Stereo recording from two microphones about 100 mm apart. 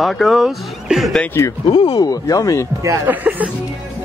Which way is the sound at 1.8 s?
40° left (ahead or behind).